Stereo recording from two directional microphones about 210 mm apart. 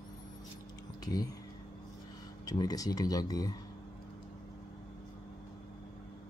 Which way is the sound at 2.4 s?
15° left (ahead or behind).